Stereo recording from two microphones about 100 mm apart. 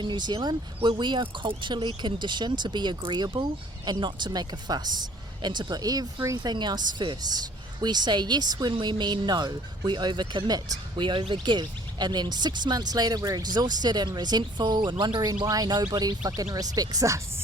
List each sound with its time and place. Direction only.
0.0 s speech: 50° right (ahead or behind)